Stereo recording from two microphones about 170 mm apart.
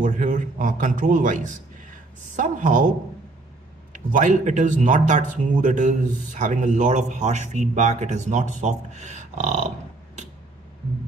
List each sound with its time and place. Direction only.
0.0 s a man's voice: 50° right (ahead or behind)
3.9 s speech: 50° right (ahead or behind)